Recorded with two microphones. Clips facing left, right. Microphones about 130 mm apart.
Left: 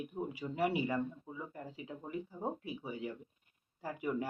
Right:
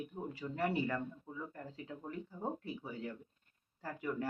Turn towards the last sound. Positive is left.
turn(degrees=15)  # may be behind; listen again after turning